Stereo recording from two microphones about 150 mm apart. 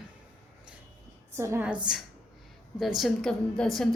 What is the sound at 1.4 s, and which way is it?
Speech, 20° right (ahead or behind).